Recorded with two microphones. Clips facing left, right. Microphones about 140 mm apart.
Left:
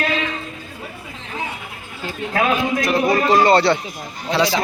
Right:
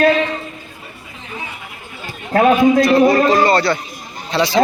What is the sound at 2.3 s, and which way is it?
Speech, 40° right (ahead or behind).